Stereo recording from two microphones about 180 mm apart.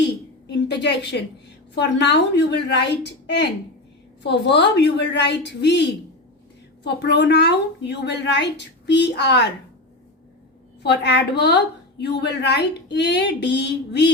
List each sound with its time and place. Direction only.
0.1 s a sound: 70° left (ahead or behind)
1.7 s a woman's voice: 75° left (ahead or behind)
10.8 s a woman's voice: 70° left (ahead or behind)